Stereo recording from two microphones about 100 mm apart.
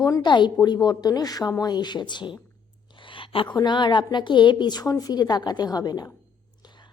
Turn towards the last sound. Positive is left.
turn(degrees=40)  # may be behind; listen again after turning